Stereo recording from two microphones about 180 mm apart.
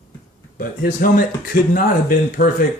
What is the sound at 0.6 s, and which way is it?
Speech, 50° left (ahead or behind).